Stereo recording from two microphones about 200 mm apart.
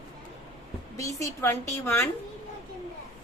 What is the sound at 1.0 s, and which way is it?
A woman's voice, 15° left (ahead or behind).